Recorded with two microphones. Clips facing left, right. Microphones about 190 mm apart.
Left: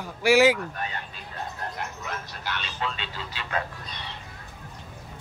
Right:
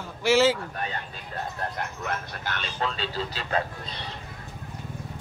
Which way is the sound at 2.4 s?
45° right (ahead or behind).